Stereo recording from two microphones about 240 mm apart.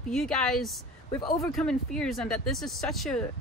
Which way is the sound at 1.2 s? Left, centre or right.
Centre.